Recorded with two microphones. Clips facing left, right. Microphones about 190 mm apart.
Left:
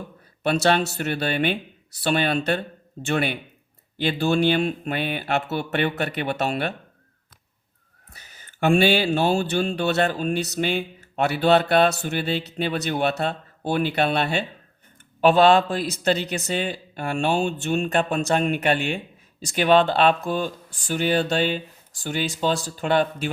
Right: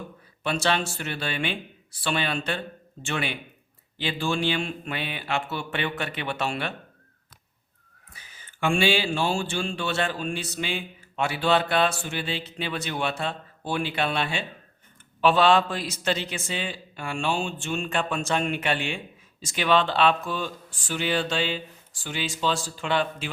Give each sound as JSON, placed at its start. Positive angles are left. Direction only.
{"t": 0.5, "sound": "speech", "side_deg": 40}
{"t": 8.4, "sound": "speech", "side_deg": 40}
{"t": 10.6, "sound": "speech", "side_deg": 55}
{"t": 12.6, "sound": "speech", "side_deg": 45}
{"t": 17.3, "sound": "speech", "side_deg": 40}